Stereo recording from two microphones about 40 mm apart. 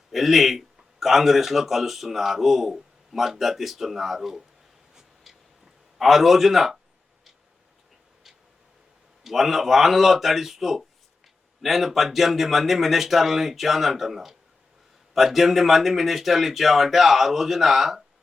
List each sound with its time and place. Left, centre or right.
0.1 s a man's voice: centre
4.9 s vehicle: centre
6.0 s a man's voice: centre
9.2 s a man's voice: centre